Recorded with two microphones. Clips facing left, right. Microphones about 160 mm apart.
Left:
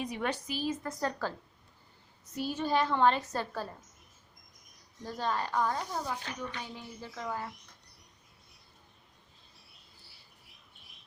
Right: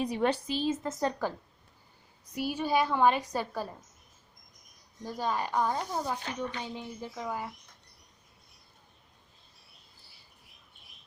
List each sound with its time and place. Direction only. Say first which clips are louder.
0.0 s a woman's voice: right 6 dB; 30° right (ahead or behind)
2.3 s a woman's voice: right 2 dB; 10° right (ahead or behind)
5.0 s a woman's voice: right 1 dB; 10° right (ahead or behind)